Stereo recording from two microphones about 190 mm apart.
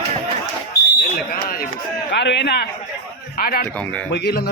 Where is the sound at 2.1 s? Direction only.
65° left (ahead or behind).